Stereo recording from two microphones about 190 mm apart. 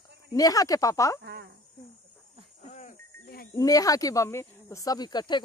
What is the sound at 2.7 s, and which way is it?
Wild animals, 40° left (ahead or behind).